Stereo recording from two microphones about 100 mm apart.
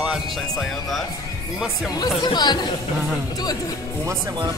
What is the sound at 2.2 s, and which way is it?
Speech, 45° left (ahead or behind).